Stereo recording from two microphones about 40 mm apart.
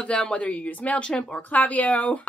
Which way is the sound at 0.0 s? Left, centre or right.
Left.